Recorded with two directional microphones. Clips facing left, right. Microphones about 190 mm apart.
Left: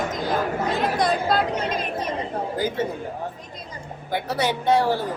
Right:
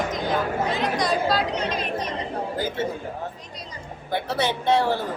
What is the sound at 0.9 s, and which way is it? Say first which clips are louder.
Chatter: left 2 dB; 55° left (ahead or behind).